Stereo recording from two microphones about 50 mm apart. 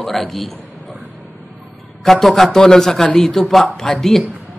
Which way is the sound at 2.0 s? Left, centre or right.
Centre.